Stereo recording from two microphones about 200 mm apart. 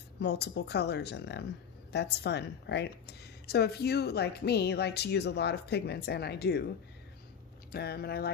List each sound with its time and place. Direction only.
0.2 s a woman's voice: 55° left (ahead or behind)
7.7 s speech: 55° left (ahead or behind)